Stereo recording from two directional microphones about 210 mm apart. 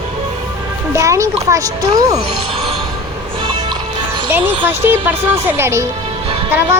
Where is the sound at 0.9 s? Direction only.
15° right (ahead or behind).